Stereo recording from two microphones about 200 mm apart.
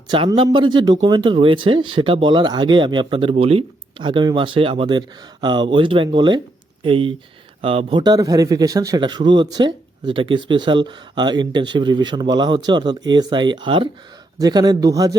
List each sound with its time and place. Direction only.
0.1 s a man's voice: 25° right (ahead or behind)